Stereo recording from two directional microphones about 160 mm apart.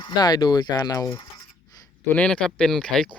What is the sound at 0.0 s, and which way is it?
Speech, 25° left (ahead or behind).